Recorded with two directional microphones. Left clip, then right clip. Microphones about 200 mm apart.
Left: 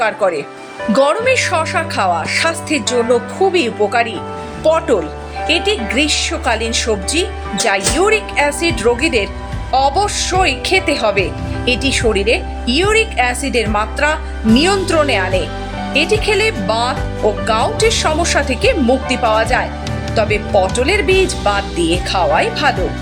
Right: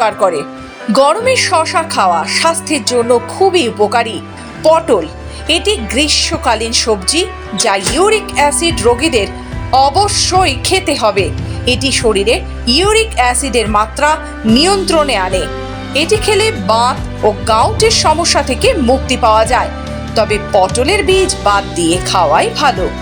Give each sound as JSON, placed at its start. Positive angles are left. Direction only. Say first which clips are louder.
{"t": 0.0, "sound": "speech", "louder": "right 3 dB", "side_deg": -15}